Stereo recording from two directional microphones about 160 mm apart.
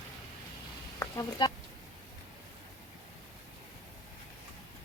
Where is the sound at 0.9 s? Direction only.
20° left (ahead or behind).